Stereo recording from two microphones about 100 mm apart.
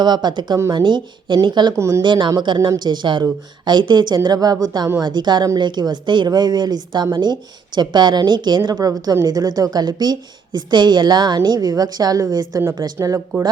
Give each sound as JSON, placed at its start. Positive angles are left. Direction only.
{"t": 0.0, "sound": "speech", "side_deg": -45}